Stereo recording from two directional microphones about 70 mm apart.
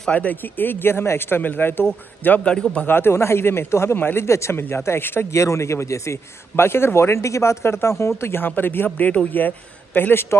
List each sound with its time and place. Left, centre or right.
0.1 s speech: left
2.9 s speech: left